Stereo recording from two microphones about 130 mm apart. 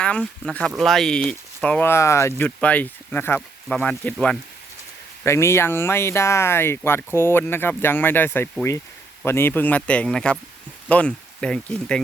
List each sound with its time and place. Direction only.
0.0 s speech: 10° left (ahead or behind)
2.4 s speech: 10° left (ahead or behind)
5.2 s speech: 20° left (ahead or behind)